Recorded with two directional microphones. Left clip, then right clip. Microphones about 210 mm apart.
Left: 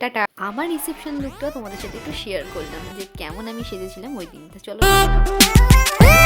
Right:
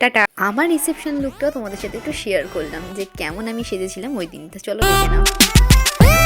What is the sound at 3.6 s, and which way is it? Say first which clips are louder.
Speech: right 6 dB; 15° right (ahead or behind).